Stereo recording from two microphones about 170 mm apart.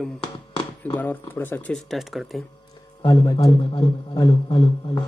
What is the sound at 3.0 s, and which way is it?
Speech, 20° left (ahead or behind).